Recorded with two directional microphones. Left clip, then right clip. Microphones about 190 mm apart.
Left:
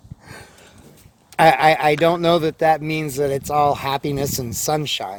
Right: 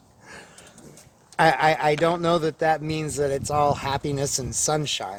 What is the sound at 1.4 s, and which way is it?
Speech, 50° left (ahead or behind).